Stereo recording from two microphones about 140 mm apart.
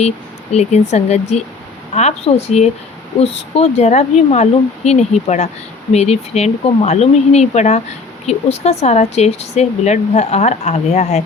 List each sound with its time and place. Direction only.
0.5 s speech: 50° left (ahead or behind)